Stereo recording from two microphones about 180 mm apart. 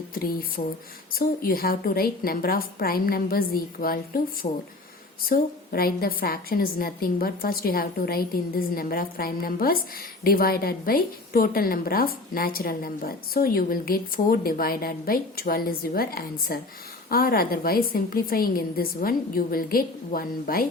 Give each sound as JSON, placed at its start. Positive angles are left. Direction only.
{"t": 0.1, "sound": "a woman's voice", "side_deg": 55}
{"t": 5.3, "sound": "a woman's voice", "side_deg": 55}